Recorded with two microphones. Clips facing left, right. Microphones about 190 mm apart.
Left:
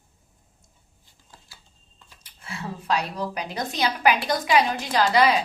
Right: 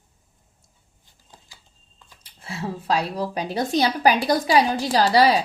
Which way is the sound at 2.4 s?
30° right (ahead or behind).